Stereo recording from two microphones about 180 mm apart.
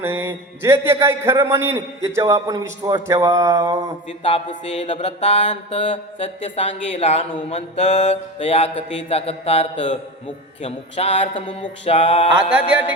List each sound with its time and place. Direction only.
0.0 s a man's voice: 10° right (ahead or behind)
4.2 s mantra: 30° left (ahead or behind)